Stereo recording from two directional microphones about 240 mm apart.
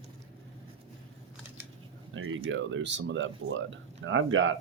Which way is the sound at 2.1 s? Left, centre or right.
Right.